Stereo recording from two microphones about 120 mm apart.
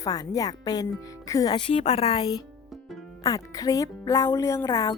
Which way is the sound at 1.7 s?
60° left (ahead or behind).